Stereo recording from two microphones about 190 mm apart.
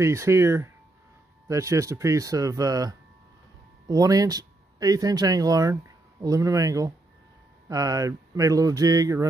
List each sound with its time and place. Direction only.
0.0 s speech: 15° right (ahead or behind)